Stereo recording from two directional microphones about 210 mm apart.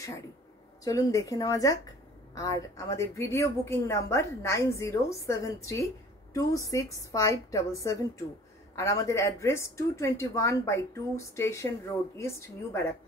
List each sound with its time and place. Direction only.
0.8 s a woman's voice: 15° left (ahead or behind)